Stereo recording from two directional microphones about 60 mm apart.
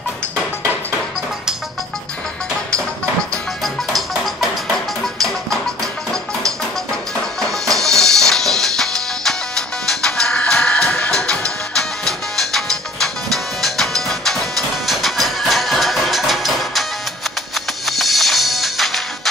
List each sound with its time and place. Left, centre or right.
3.6 s music: centre
7.7 s music: centre
12.0 s music: centre
17.8 s music: centre